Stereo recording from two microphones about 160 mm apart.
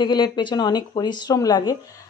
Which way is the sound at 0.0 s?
30° left (ahead or behind).